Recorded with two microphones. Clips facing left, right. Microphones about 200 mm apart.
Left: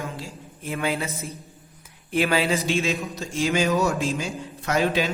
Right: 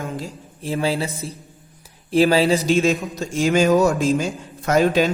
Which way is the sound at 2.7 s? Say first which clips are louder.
Right 7 dB; 45° right (ahead or behind).